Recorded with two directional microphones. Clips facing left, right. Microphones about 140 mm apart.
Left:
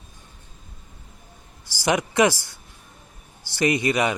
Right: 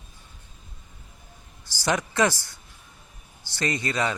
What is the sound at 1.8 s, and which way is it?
A man's voice, 15° left (ahead or behind).